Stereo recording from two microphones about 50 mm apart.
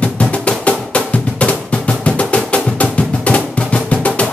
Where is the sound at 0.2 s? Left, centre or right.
Left.